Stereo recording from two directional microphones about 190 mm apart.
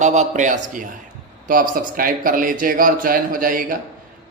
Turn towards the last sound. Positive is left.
turn(degrees=-45)  # may be behind; listen again after turning